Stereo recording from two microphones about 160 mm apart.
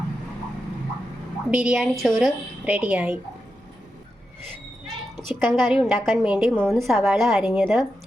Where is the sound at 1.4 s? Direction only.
5° right (ahead or behind).